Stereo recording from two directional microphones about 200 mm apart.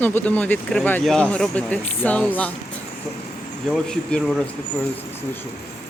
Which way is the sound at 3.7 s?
5° left (ahead or behind).